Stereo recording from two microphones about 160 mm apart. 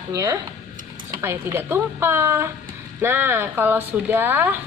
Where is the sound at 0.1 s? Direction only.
20° right (ahead or behind).